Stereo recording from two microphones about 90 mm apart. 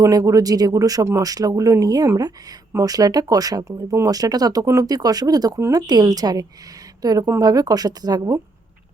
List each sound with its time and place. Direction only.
0.0 s speech: 40° right (ahead or behind)